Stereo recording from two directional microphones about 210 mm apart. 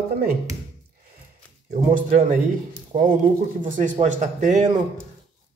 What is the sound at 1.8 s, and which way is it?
Speech, 40° right (ahead or behind).